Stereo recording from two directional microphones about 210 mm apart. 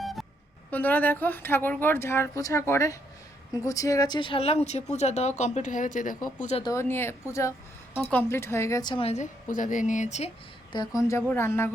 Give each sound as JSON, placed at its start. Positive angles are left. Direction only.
{"t": 0.0, "sound": "a sound", "side_deg": 0}
{"t": 0.7, "sound": "speech", "side_deg": 10}
{"t": 6.6, "sound": "a woman's voice", "side_deg": 15}